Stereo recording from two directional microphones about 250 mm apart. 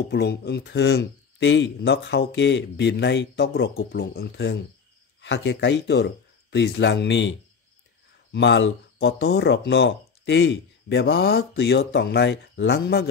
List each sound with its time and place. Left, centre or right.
0.1 s speech: left